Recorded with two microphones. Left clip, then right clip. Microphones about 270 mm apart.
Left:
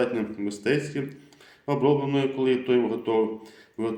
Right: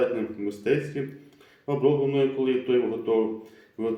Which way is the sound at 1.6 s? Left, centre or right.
Left.